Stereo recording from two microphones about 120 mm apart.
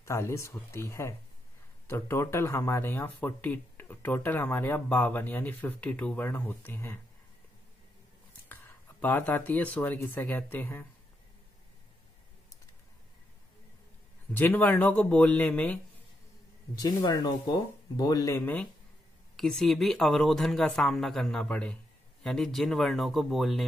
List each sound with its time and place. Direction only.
0.0 s speech: 25° left (ahead or behind)
9.0 s speech: 15° left (ahead or behind)
14.3 s speech: 15° left (ahead or behind)
16.7 s speech: 35° left (ahead or behind)
18.4 s speech: 10° left (ahead or behind)